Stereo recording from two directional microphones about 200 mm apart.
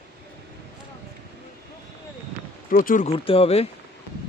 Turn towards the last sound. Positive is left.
turn(degrees=30)  # may be behind; listen again after turning